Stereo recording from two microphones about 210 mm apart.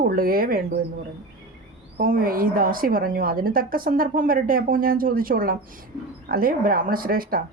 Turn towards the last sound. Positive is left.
turn(degrees=-45)  # may be behind; listen again after turning